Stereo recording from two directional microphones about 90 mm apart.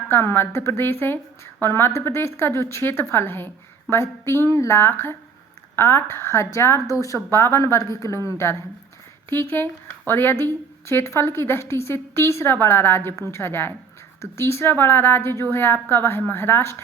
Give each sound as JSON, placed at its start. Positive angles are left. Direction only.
{"t": 0.1, "sound": "a woman's voice", "side_deg": 25}